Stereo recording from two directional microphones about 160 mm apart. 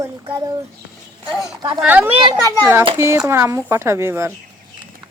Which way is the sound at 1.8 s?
10° right (ahead or behind).